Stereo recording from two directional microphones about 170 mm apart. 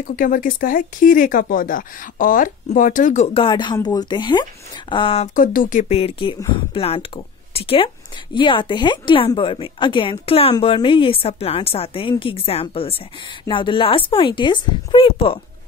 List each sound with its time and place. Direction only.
0.1 s speech: 55° left (ahead or behind)
3.3 s speech: 30° left (ahead or behind)
5.3 s speech: 55° left (ahead or behind); by 15.4 s 30° left (ahead or behind)